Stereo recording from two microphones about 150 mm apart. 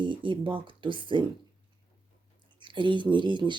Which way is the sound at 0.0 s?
35° right (ahead or behind).